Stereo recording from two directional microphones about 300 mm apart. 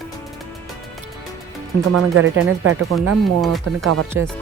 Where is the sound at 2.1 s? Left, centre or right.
Right.